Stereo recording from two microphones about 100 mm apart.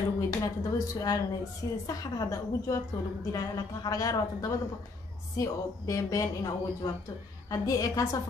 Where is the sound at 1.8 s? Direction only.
35° left (ahead or behind).